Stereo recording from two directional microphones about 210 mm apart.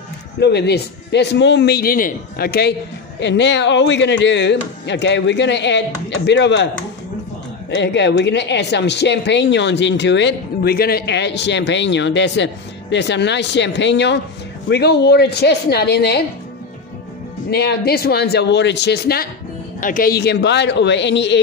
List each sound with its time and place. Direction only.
0.4 s a man's voice: 55° left (ahead or behind)
7.7 s a man's voice: 55° left (ahead or behind)
17.5 s a man's voice: 50° left (ahead or behind)